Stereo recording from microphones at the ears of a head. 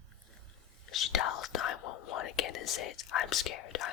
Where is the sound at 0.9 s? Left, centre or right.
Left.